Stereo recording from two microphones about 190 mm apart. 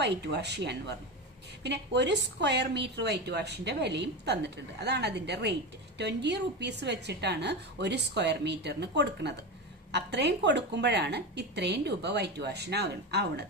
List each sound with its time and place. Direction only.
0.0 s a woman's voice: 60° right (ahead or behind)